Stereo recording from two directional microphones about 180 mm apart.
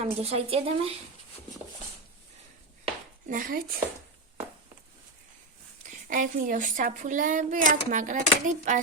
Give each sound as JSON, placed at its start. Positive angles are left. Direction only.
{"t": 0.0, "sound": "a woman's voice", "side_deg": -35}
{"t": 3.2, "sound": "a woman's voice", "side_deg": -50}
{"t": 5.8, "sound": "a woman's voice", "side_deg": -45}